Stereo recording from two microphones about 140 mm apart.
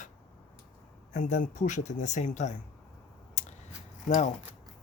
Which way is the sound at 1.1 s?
60° left (ahead or behind).